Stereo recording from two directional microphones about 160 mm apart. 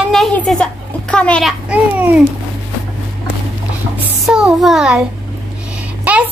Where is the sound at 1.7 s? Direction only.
10° right (ahead or behind).